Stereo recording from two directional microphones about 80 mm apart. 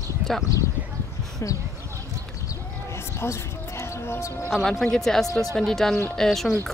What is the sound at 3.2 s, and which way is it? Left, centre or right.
Music, left.